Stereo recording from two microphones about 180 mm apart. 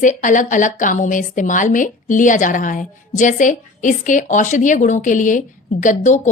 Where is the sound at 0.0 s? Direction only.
45° left (ahead or behind).